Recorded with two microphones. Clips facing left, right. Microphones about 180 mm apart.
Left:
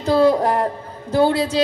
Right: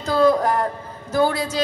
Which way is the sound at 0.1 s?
30° left (ahead or behind).